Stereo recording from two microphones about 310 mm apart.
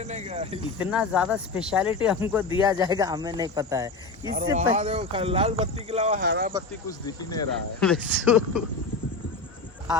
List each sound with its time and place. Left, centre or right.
0.0 s speech: right
0.8 s speech: centre; by 6.5 s right
6.8 s speech: centre